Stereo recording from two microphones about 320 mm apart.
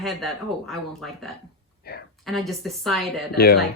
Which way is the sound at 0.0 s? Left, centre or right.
Centre.